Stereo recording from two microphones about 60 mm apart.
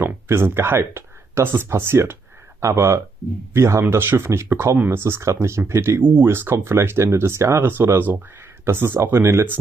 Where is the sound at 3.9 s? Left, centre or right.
Right.